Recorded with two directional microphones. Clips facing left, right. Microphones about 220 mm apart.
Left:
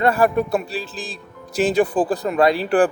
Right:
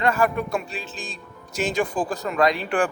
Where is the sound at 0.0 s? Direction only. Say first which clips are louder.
Left 5 dB; 35° left (ahead or behind).